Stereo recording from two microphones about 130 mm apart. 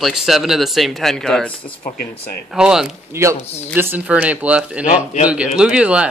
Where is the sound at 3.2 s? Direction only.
20° right (ahead or behind).